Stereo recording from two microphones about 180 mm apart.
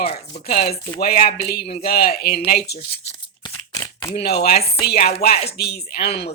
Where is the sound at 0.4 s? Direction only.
60° left (ahead or behind).